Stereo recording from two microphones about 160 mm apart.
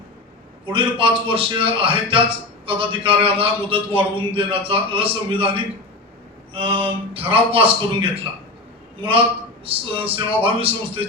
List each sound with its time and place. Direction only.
0.7 s a man's voice: 35° right (ahead or behind)